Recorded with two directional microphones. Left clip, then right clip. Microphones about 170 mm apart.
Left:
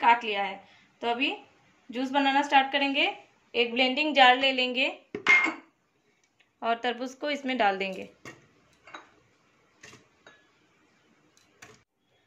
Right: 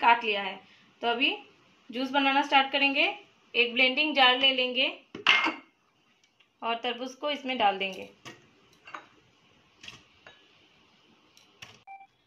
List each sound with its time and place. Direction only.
0.0 s a woman's voice: 25° left (ahead or behind); by 4.9 s 45° left (ahead or behind)
6.6 s a woman's voice: 40° left (ahead or behind)